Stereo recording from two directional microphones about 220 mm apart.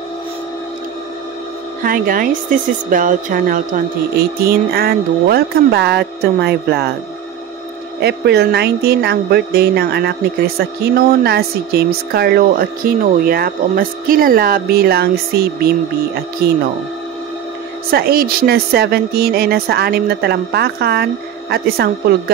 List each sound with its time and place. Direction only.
1.8 s a woman's voice: 40° right (ahead or behind)
8.0 s speech: 50° right (ahead or behind)
17.9 s speech: 45° right (ahead or behind)